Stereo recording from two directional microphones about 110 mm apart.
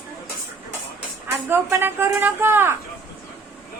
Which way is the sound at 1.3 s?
25° right (ahead or behind).